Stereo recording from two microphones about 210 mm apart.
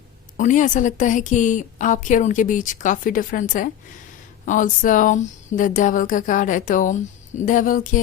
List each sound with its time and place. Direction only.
0.3 s speech: 35° left (ahead or behind)